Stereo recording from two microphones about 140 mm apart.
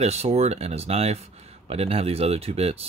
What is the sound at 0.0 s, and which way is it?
Speech, 50° right (ahead or behind).